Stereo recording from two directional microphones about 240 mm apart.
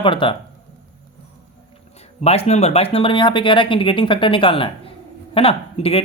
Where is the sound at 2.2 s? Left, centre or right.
Left.